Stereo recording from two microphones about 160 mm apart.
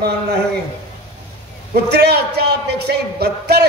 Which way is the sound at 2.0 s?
90° right.